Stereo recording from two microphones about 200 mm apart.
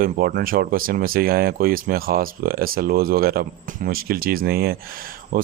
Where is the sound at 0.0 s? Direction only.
45° right (ahead or behind).